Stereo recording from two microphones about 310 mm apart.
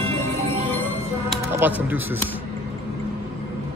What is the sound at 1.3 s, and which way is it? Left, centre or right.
Music, centre.